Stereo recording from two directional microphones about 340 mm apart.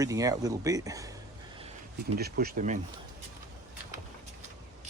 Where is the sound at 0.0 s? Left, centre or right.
Centre.